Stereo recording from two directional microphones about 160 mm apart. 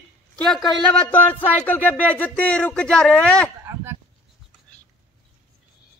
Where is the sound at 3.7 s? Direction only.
15° right (ahead or behind).